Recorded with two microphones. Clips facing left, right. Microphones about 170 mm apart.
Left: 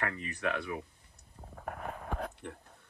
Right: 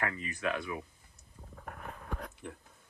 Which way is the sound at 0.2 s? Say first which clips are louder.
Even; 65° left (ahead or behind).